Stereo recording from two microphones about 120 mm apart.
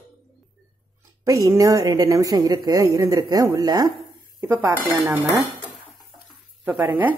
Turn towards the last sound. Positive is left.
turn(degrees=-15)  # may be behind; listen again after turning